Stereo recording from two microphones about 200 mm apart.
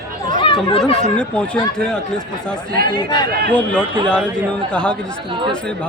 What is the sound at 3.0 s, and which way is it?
Speech, 20° left (ahead or behind).